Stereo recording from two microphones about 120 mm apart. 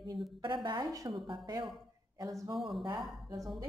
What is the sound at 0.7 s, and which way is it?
A woman's voice, 35° right (ahead or behind).